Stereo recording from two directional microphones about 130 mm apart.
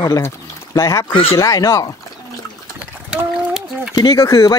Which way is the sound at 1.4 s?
25° left (ahead or behind).